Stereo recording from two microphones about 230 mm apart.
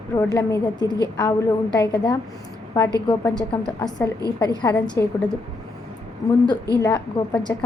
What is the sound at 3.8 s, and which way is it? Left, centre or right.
A woman's voice, centre.